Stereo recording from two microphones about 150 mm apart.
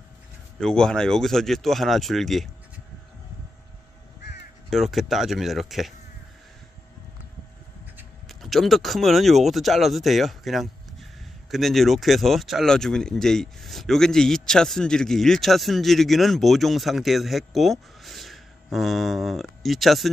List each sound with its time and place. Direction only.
0.6 s speech: 5° left (ahead or behind)
4.6 s speech: centre (ahead or behind)
8.3 s speech: centre (ahead or behind)